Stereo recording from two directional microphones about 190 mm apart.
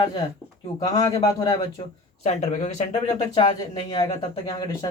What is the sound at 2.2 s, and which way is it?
Speech, 35° left (ahead or behind).